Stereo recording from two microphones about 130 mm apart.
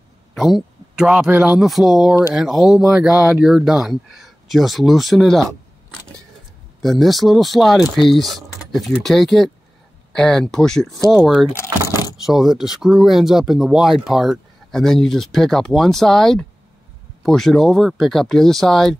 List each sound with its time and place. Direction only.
0.3 s speech: centre (ahead or behind)
6.8 s speech: centre (ahead or behind)
11.5 s vehicle: 25° left (ahead or behind)
12.2 s speech: 5° right (ahead or behind)